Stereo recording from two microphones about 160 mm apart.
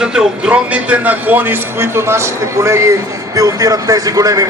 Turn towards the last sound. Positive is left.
turn(degrees=-20)  # may be behind; listen again after turning